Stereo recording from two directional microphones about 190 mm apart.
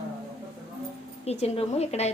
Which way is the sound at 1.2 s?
35° left (ahead or behind).